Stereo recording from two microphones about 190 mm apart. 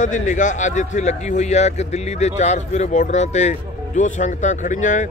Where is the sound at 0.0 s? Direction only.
40° left (ahead or behind).